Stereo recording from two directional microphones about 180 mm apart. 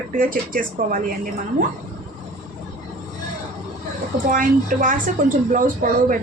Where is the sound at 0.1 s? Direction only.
50° right (ahead or behind).